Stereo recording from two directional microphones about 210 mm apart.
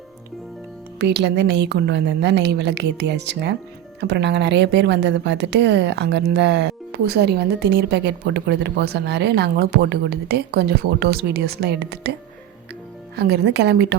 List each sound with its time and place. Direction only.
0.9 s a woman's voice: 55° right (ahead or behind)
13.1 s a woman's voice: 50° right (ahead or behind)